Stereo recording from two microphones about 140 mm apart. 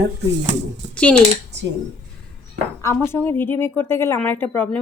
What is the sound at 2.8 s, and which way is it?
Speech, 20° left (ahead or behind).